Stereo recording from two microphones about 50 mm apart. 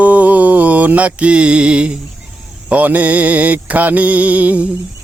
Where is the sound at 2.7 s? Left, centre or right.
Right.